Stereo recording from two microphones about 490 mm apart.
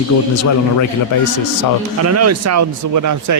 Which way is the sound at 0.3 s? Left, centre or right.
Left.